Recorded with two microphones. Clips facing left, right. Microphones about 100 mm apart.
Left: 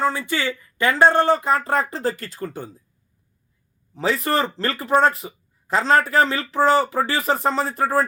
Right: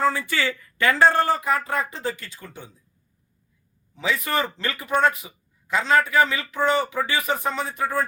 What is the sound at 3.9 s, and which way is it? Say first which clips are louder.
Speech: left 4 dB; 35° left (ahead or behind).